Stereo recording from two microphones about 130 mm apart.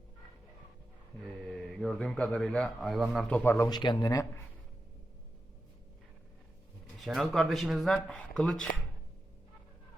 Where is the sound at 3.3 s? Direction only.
10° left (ahead or behind).